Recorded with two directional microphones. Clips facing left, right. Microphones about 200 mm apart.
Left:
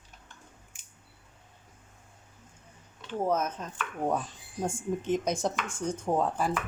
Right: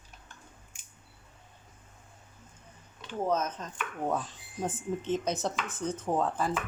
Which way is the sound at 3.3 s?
10° left (ahead or behind).